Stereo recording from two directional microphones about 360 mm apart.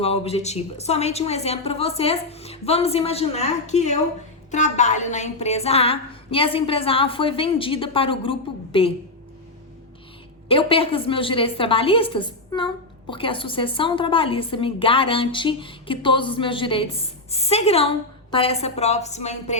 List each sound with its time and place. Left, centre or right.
0.0 s a woman's voice: centre
10.5 s a woman's voice: centre